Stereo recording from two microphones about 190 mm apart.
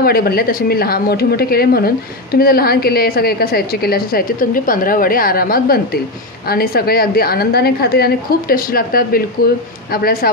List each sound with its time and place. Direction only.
0.0 s a woman's voice: 55° left (ahead or behind)